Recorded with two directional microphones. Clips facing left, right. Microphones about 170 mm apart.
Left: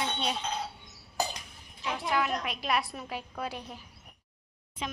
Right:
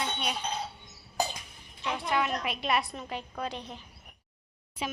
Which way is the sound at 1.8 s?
Centre (ahead or behind).